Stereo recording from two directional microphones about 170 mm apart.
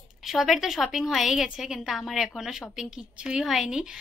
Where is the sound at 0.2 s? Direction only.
Centre (ahead or behind).